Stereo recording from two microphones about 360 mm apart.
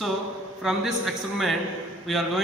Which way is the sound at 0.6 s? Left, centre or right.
Centre.